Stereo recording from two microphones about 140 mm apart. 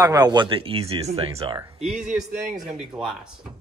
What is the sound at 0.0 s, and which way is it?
Speech, 30° right (ahead or behind).